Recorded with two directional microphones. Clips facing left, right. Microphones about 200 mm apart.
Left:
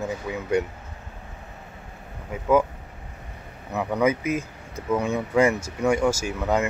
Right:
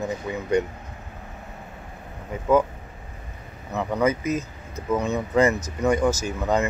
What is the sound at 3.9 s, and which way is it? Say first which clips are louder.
Speech: even; 10° left (ahead or behind).